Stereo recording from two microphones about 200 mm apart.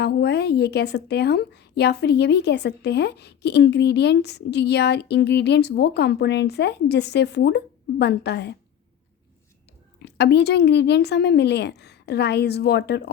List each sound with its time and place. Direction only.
0.0 s a woman's voice: 55° left (ahead or behind)
10.0 s a woman's voice: 55° left (ahead or behind)